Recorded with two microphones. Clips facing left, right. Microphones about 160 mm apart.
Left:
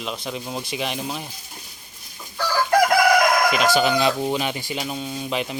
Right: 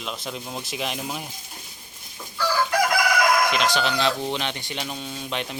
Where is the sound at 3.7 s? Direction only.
10° left (ahead or behind).